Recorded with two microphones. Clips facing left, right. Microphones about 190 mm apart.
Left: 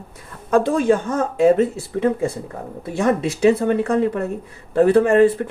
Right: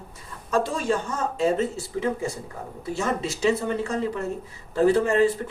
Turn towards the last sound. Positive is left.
turn(degrees=55)  # may be behind; listen again after turning